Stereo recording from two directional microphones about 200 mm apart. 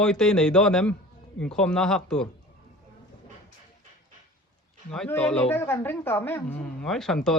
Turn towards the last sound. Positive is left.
turn(degrees=0)  # may be behind; listen again after turning